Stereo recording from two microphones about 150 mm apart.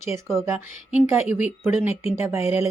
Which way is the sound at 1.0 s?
10° right (ahead or behind).